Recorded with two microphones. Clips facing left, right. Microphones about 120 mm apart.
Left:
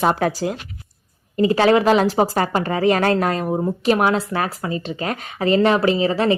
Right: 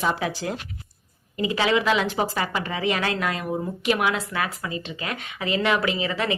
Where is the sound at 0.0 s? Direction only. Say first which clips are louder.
Left 7 dB; 50° left (ahead or behind).